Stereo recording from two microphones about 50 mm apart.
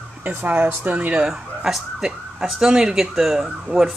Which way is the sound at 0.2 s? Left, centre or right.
Right.